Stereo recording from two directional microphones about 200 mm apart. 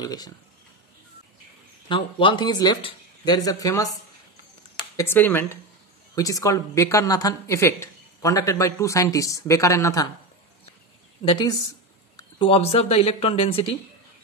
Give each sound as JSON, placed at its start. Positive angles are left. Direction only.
{"t": 0.0, "sound": "speech", "side_deg": 20}
{"t": 1.9, "sound": "speech", "side_deg": 25}
{"t": 4.9, "sound": "speech", "side_deg": 10}
{"t": 11.2, "sound": "speech", "side_deg": 20}